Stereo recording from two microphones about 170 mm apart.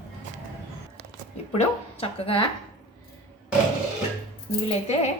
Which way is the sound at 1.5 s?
35° left (ahead or behind).